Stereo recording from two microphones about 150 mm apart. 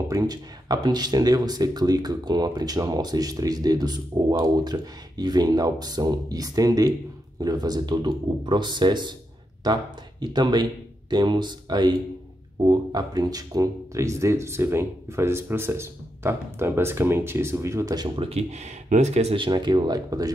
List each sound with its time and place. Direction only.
0.1 s speech: 25° right (ahead or behind)